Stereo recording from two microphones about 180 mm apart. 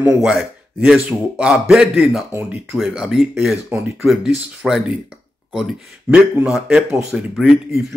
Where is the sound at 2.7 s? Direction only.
Centre (ahead or behind).